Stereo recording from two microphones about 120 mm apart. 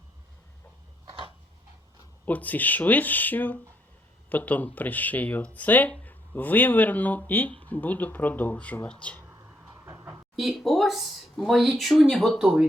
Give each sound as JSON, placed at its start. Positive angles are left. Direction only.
{"t": 2.2, "sound": "speech", "side_deg": 15}
{"t": 9.8, "sound": "a sound", "side_deg": -20}
{"t": 10.3, "sound": "speech", "side_deg": 0}